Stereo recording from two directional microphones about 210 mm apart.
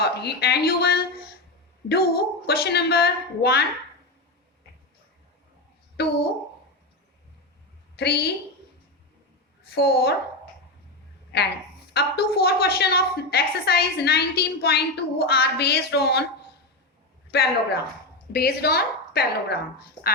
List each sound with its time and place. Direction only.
0.0 s a woman's voice: 50° left (ahead or behind)
6.0 s a woman's voice: 50° left (ahead or behind)
7.9 s a woman's voice: 50° left (ahead or behind)
9.7 s a woman's voice: 50° left (ahead or behind)
11.9 s a woman's voice: 50° left (ahead or behind)
17.3 s a woman's voice: 50° left (ahead or behind)